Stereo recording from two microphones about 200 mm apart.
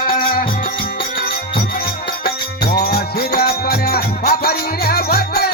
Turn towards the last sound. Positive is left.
turn(degrees=50)  # may be behind; listen again after turning